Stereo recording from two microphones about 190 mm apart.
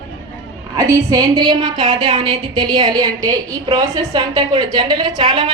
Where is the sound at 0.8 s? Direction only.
20° right (ahead or behind).